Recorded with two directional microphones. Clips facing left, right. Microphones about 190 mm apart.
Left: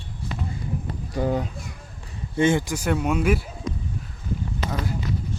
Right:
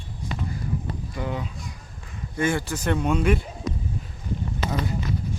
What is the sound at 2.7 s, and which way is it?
Speech, 10° left (ahead or behind).